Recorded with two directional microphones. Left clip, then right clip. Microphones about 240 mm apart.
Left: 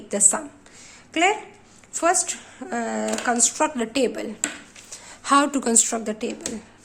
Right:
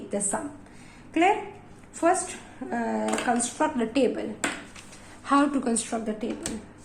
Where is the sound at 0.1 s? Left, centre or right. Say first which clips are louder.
Left 7 dB; left.